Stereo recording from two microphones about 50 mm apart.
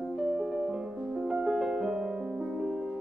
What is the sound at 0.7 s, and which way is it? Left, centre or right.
Music, centre.